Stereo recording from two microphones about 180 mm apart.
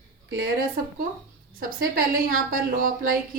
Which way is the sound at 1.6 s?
50° right (ahead or behind).